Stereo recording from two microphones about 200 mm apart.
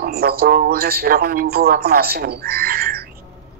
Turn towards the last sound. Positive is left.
turn(degrees=-50)  # may be behind; listen again after turning